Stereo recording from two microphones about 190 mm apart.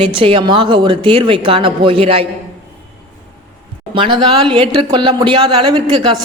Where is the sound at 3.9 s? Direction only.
25° right (ahead or behind).